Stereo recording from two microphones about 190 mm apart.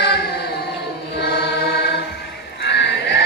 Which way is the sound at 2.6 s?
60° left (ahead or behind).